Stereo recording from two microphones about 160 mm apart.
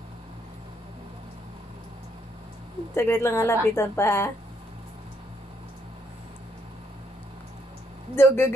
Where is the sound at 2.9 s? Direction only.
15° left (ahead or behind).